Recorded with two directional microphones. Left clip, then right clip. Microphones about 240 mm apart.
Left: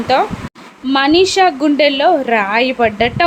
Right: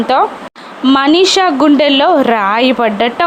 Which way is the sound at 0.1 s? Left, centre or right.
Centre.